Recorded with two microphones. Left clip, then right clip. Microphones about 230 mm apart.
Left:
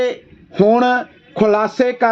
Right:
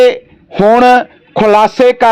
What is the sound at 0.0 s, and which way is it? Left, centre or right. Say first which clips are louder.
Speech: right 12 dB; right.